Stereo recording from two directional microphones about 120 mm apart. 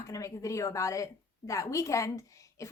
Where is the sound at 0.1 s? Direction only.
25° left (ahead or behind).